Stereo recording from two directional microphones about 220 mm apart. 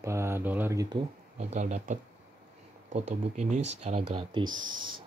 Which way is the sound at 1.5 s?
30° right (ahead or behind).